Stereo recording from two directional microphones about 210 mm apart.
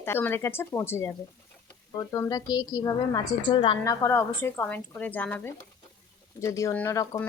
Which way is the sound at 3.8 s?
15° left (ahead or behind).